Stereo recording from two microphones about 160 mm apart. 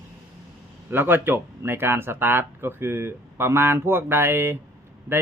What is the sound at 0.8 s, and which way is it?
Speech, 15° right (ahead or behind).